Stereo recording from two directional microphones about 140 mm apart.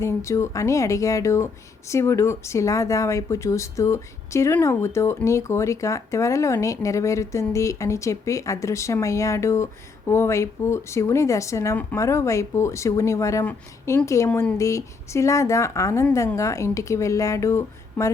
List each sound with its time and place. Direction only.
0.0 s speech: 20° left (ahead or behind)
14.3 s speech: 10° left (ahead or behind)
14.6 s speech: 20° left (ahead or behind)